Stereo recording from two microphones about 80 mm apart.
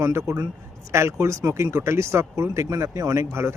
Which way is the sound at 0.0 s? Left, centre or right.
Right.